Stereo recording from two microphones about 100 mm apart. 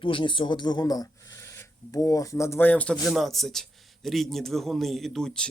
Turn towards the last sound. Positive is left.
turn(degrees=5)  # may be behind; listen again after turning